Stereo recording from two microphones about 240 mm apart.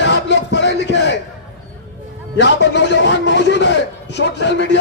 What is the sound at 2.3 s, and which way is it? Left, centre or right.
A man's voice, left.